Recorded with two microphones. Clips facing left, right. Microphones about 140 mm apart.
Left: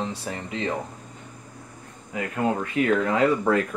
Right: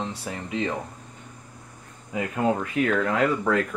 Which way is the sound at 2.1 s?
15° right (ahead or behind).